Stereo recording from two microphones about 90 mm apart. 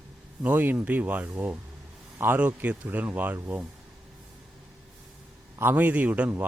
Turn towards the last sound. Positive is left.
turn(degrees=-15)  # may be behind; listen again after turning